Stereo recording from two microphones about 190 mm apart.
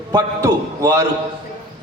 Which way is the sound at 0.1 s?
15° right (ahead or behind).